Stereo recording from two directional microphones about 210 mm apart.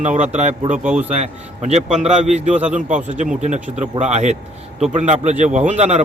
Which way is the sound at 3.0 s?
35° right (ahead or behind).